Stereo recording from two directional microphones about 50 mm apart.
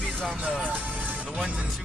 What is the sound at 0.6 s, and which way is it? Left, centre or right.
Music, right.